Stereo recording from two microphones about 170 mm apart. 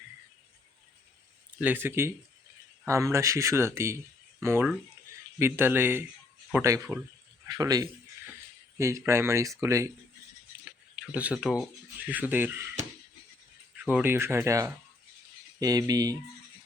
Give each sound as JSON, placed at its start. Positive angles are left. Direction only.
{"t": 1.5, "sound": "speech", "side_deg": -10}
{"t": 10.7, "sound": "speech", "side_deg": -5}